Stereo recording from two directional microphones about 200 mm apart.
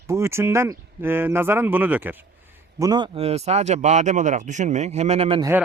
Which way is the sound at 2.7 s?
20° right (ahead or behind).